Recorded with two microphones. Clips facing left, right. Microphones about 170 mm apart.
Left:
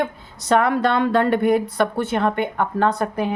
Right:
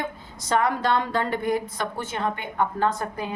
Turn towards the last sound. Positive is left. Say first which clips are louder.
# left 6 dB
turn(degrees=65)  # may be behind; listen again after turning